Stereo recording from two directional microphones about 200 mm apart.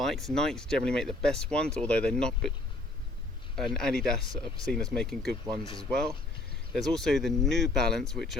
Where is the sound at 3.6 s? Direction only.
Centre (ahead or behind).